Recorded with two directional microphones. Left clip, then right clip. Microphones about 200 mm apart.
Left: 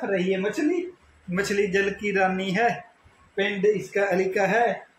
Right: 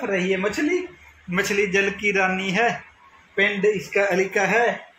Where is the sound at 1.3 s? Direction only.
10° right (ahead or behind).